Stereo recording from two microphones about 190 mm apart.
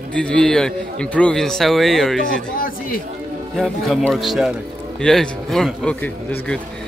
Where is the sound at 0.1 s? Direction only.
5° left (ahead or behind).